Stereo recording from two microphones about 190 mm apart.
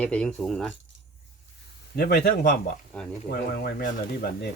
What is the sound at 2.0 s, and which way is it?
Speech, 55° left (ahead or behind).